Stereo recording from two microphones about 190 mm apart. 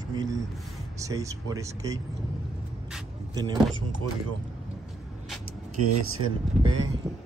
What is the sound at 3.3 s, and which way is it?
Speech, 20° right (ahead or behind).